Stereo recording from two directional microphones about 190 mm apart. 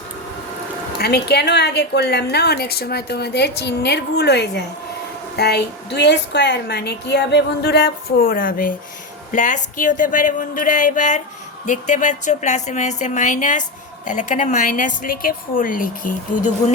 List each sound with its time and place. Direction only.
0.9 s a woman's voice: 55° left (ahead or behind)